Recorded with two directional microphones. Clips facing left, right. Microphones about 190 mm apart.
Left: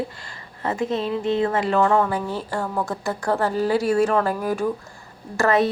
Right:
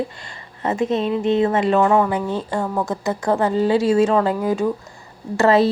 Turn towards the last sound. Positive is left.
turn(degrees=-25)  # may be behind; listen again after turning